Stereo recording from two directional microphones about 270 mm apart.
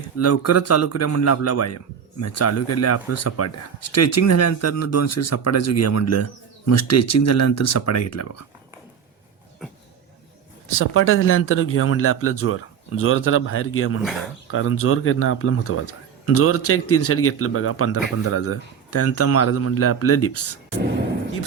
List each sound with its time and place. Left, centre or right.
0.2 s speech: left
10.7 s speech: left
14.0 s speech: centre
14.5 s speech: left